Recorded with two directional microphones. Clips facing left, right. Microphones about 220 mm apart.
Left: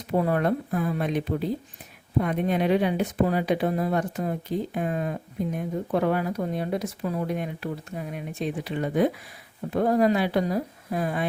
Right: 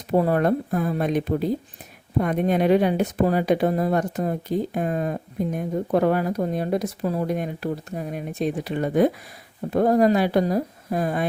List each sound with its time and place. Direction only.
0.1 s speech: 40° right (ahead or behind)